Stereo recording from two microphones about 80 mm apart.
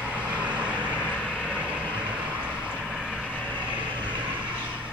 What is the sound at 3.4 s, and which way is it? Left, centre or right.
Vehicle, left.